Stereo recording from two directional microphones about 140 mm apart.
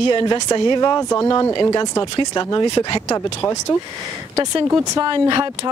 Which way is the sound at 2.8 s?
20° left (ahead or behind).